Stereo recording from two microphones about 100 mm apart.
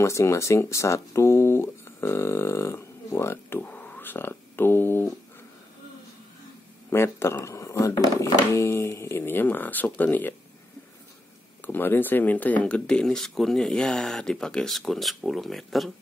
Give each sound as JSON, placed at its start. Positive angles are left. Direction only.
{"t": 0.0, "sound": "speech", "side_deg": 30}
{"t": 6.9, "sound": "speech", "side_deg": 25}
{"t": 11.6, "sound": "speech", "side_deg": 20}